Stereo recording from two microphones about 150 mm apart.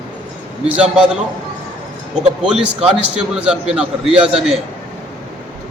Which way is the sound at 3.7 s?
5° right (ahead or behind).